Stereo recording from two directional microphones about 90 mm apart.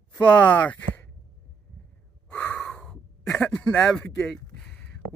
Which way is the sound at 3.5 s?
10° left (ahead or behind).